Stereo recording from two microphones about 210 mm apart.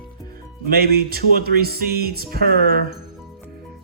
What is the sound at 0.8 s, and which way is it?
Speech, 45° right (ahead or behind).